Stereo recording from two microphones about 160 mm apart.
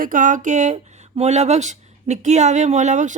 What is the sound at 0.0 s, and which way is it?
Speech, 55° right (ahead or behind).